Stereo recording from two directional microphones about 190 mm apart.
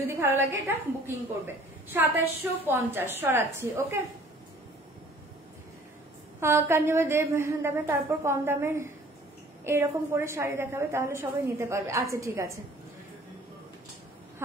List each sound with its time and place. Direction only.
0.1 s a woman's voice: 10° right (ahead or behind)
6.4 s a woman's voice: 15° right (ahead or behind)